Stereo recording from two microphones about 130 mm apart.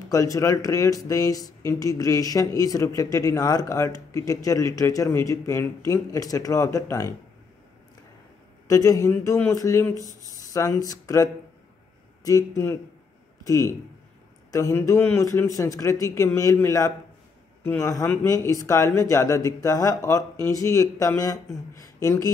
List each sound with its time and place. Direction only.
0.1 s speech: 25° left (ahead or behind)
8.6 s speech: 25° left (ahead or behind)
12.3 s speech: 25° left (ahead or behind)